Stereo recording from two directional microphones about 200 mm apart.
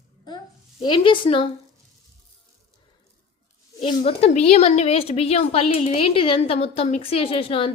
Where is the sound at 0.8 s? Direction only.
25° left (ahead or behind).